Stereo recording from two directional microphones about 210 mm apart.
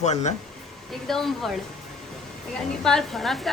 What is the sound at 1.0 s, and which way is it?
Speech, centre (ahead or behind).